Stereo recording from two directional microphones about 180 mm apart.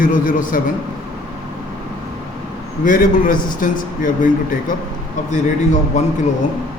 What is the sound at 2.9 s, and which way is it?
Speech, 50° left (ahead or behind).